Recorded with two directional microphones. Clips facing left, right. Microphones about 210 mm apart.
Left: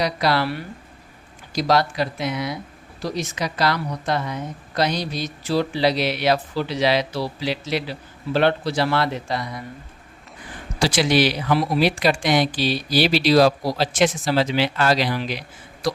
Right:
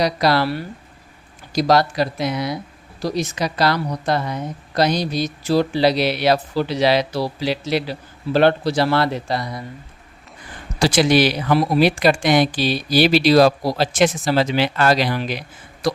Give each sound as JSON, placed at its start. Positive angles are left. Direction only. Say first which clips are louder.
{"t": 0.0, "sound": "a woman's voice", "louder": "right 3 dB", "side_deg": -40}
{"t": 1.5, "sound": "a woman's voice", "louder": "right 3 dB", "side_deg": -40}
{"t": 10.8, "sound": "speech", "louder": "right 3 dB", "side_deg": -45}